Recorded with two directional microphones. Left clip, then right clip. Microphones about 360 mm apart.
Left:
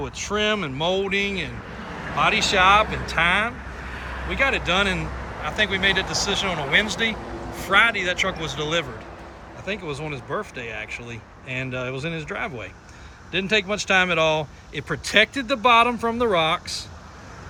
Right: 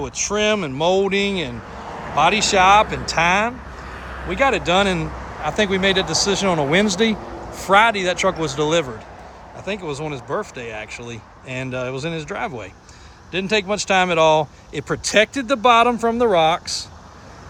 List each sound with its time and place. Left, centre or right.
0.0 s speech: centre
3.9 s vehicle: right
4.3 s speech: centre